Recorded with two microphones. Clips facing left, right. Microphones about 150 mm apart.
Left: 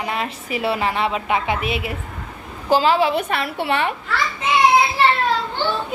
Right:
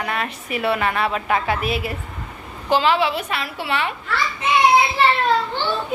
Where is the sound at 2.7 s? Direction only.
40° left (ahead or behind).